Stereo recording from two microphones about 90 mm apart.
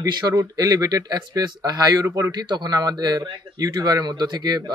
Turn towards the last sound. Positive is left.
turn(degrees=-50)  # may be behind; listen again after turning